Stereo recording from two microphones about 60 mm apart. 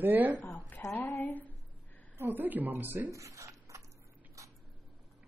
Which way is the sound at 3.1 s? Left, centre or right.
Right.